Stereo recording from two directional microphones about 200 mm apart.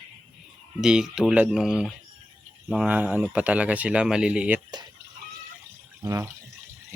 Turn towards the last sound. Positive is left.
turn(degrees=-15)  # may be behind; listen again after turning